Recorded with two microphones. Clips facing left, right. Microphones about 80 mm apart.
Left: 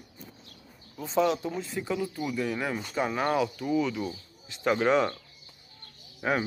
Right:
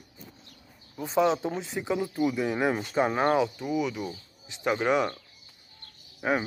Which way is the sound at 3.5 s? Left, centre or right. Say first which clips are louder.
Left 1 dB; centre.